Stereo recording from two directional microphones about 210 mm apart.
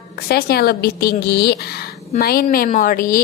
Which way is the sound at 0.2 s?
45° left (ahead or behind).